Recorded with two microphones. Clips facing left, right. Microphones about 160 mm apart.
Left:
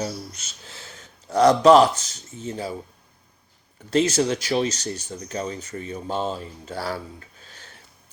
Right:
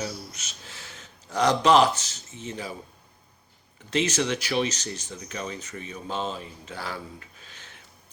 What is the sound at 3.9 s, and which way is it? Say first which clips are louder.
Speech: left 5 dB; 35° left (ahead or behind).